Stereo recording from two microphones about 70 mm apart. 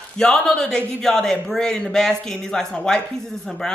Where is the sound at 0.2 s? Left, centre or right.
Centre.